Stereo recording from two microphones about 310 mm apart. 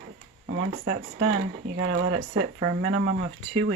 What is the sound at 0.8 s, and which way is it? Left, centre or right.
Speech, right.